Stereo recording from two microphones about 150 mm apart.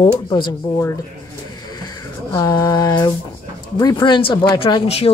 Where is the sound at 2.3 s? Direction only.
25° left (ahead or behind).